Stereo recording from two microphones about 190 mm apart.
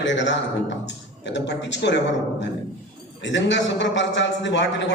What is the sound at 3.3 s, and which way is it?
A man's voice, 70° left (ahead or behind).